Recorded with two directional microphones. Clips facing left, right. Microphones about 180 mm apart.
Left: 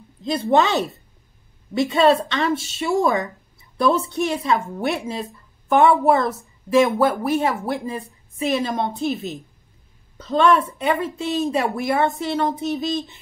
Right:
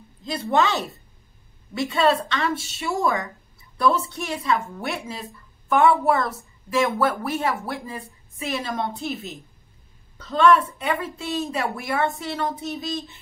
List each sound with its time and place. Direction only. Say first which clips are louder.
0.2 s a woman's voice: left 4 dB; 20° left (ahead or behind)